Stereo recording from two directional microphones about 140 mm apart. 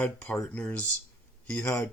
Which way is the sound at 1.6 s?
25° left (ahead or behind).